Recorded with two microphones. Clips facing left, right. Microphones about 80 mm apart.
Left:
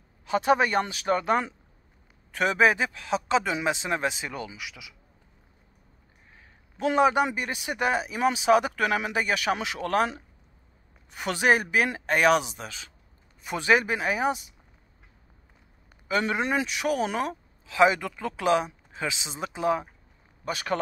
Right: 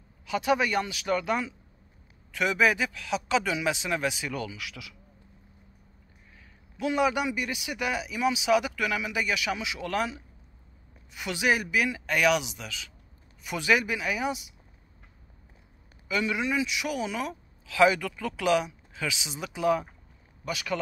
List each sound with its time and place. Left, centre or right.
0.2 s speech: left; by 4.9 s centre
6.8 s speech: left
16.1 s a man's voice: left
17.6 s speech: left
20.4 s speech: left